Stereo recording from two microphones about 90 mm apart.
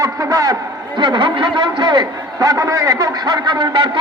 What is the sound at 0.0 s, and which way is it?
Speech, 40° right (ahead or behind).